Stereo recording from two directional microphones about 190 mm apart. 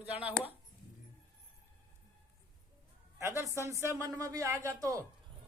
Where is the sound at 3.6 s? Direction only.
15° right (ahead or behind).